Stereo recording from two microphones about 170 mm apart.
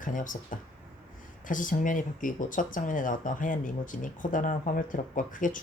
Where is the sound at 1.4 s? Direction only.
50° left (ahead or behind).